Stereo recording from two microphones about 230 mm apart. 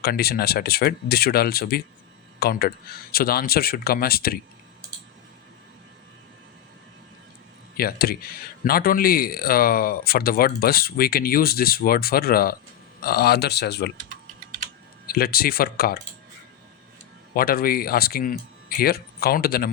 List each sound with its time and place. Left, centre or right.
0.0 s speech: left
7.8 s speech: left
15.0 s speech: left
17.3 s speech: left